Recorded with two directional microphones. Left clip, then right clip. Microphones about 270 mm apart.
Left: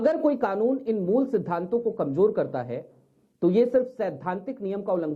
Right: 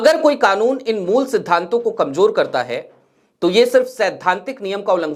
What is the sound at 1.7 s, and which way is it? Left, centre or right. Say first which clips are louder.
Speech: right 8 dB; right.